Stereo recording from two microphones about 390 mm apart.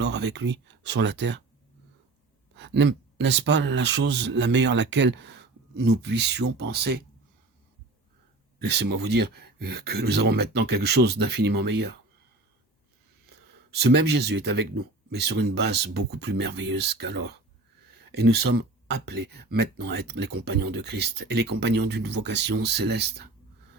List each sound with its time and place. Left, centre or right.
0.0 s speech: right
2.6 s speech: right
8.7 s speech: right
13.7 s speech: right